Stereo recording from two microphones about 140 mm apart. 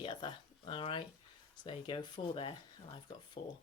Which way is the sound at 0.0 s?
35° left (ahead or behind).